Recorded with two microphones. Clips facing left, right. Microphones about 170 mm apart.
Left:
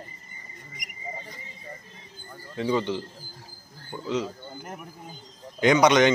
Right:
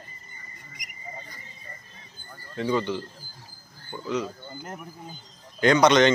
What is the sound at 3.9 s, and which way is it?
Speech, 5° right (ahead or behind).